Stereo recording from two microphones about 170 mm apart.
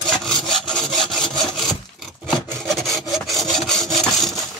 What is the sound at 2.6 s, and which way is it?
Wood, centre (ahead or behind).